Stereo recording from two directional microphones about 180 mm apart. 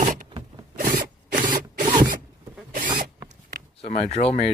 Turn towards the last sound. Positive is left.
turn(degrees=35)  # may be behind; listen again after turning